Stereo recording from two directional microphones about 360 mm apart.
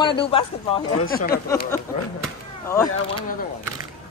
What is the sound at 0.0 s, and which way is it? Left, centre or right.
Speech, centre.